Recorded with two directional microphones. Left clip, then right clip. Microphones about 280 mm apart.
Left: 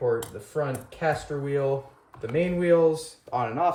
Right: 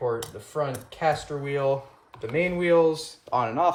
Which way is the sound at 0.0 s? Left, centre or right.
Centre.